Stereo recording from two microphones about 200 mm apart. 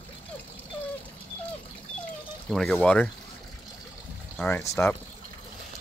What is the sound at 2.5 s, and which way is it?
Speech, centre (ahead or behind).